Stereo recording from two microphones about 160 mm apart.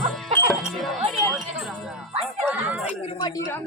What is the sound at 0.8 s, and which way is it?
Music, centre (ahead or behind).